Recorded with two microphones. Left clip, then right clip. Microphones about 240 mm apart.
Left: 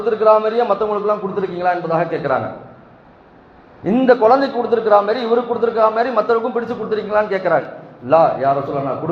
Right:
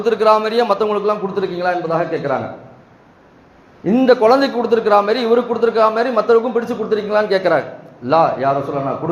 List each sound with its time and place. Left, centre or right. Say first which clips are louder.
0.0 s a man's voice: even; right
3.8 s a man's voice: even; right